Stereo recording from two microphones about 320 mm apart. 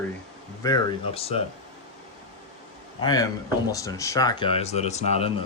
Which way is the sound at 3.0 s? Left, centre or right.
Centre.